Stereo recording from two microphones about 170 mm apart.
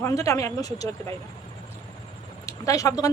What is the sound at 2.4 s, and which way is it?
Speech, 20° left (ahead or behind).